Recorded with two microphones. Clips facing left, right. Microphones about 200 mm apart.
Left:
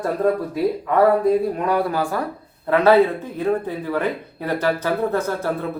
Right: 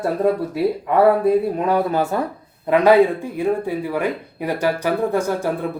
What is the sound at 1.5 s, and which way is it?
Speech, 20° right (ahead or behind).